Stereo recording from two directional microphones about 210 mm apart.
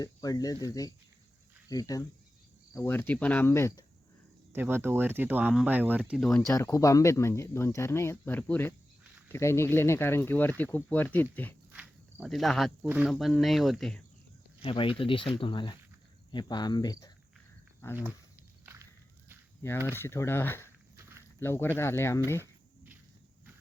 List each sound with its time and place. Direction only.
0.0 s speech: 15° left (ahead or behind)
4.5 s speech: 10° right (ahead or behind)
6.5 s speech: 15° left (ahead or behind)
11.7 s speech: 5° right (ahead or behind)
14.6 s speech: 25° left (ahead or behind)
18.6 s walk: 15° right (ahead or behind)
19.6 s speech: 10° left (ahead or behind)
20.9 s walk: 15° right (ahead or behind)
21.3 s speech: 10° left (ahead or behind)